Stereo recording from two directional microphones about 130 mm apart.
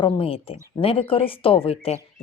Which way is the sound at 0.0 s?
45° left (ahead or behind).